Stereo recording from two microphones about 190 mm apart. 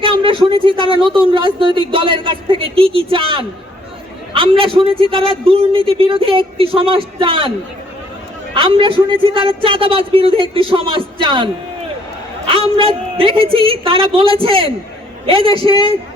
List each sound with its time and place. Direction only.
0.0 s speech: 25° right (ahead or behind)
4.5 s speech: 30° right (ahead or behind)
8.5 s speech: 25° right (ahead or behind)
12.7 s speech: 30° right (ahead or behind)
15.6 s speech: 20° left (ahead or behind)